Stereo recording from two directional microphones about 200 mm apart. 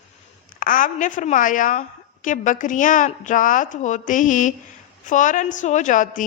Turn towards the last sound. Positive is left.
turn(degrees=40)  # may be behind; listen again after turning